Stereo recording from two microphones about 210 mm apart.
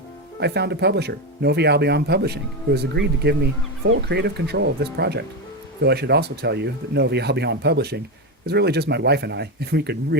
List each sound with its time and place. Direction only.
0.3 s speech: 55° right (ahead or behind)